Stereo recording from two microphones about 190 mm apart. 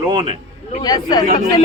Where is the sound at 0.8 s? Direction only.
20° left (ahead or behind).